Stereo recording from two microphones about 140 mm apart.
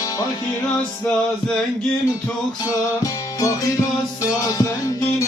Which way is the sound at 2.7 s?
25° left (ahead or behind).